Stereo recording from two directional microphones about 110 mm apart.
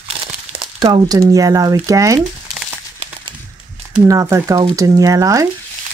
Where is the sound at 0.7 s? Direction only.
35° right (ahead or behind).